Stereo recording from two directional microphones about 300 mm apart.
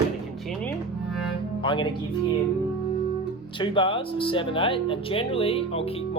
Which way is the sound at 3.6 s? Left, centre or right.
Centre.